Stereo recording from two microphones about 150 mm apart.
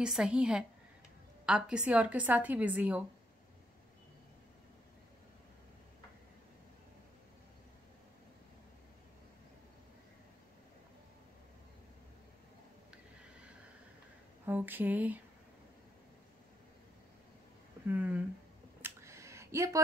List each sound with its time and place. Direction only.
0.0 s a woman's voice: 5° right (ahead or behind)
14.4 s mantra: 15° right (ahead or behind)
17.8 s a woman's voice: 10° right (ahead or behind)
18.8 s a sound: 15° right (ahead or behind)